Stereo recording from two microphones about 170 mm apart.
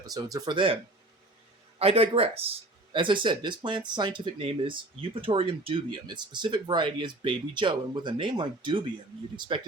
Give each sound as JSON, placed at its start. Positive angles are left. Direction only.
{"t": 0.0, "sound": "speech", "side_deg": -20}
{"t": 1.8, "sound": "speech", "side_deg": -35}